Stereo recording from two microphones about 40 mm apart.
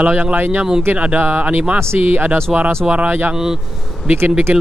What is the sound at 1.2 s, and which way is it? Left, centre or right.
Speech, right.